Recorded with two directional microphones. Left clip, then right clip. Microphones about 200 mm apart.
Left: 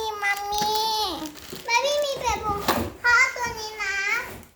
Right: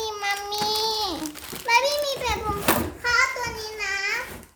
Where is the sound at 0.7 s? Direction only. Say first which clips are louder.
Left 1 dB; 15° right (ahead or behind).